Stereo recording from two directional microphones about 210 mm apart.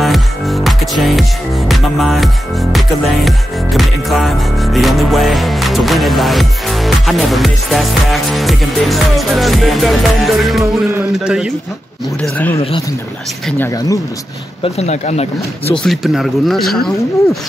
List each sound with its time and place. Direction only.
0.0 s music: centre (ahead or behind)
10.6 s music: 10° right (ahead or behind)
12.2 s speech: 10° left (ahead or behind)
14.6 s speech: 30° left (ahead or behind)
15.7 s speech: centre (ahead or behind)